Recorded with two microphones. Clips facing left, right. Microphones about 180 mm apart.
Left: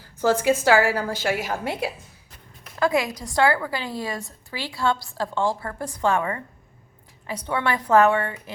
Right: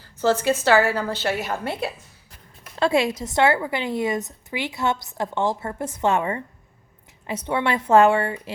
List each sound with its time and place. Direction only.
0.2 s a woman's voice: 10° left (ahead or behind)
2.7 s a woman's voice: 30° right (ahead or behind)